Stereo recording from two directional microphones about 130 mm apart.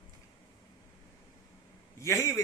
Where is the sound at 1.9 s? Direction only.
25° left (ahead or behind).